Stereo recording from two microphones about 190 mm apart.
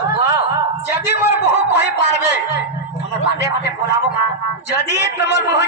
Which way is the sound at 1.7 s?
65° left (ahead or behind).